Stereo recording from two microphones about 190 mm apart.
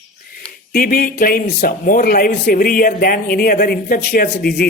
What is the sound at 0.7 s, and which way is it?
A man's voice, 50° left (ahead or behind).